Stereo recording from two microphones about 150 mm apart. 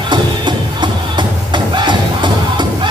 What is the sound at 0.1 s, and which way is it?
Music, 30° right (ahead or behind).